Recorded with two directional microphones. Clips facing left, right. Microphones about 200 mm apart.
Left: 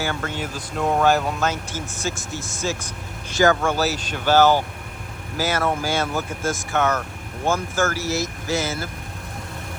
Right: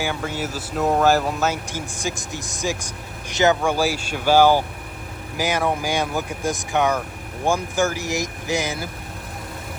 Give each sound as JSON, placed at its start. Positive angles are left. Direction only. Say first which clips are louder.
{"t": 0.0, "sound": "speech", "louder": "right 1 dB", "side_deg": -10}